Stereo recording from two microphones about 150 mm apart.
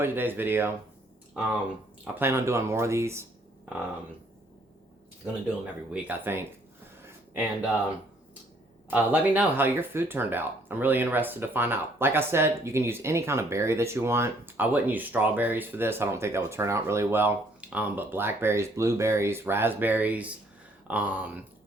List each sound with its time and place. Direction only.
0.0 s speech: 15° right (ahead or behind)
2.1 s speech: 15° right (ahead or behind)
5.9 s speech: 15° right (ahead or behind)
7.0 s a sound: 10° right (ahead or behind)
8.9 s speech: 10° right (ahead or behind)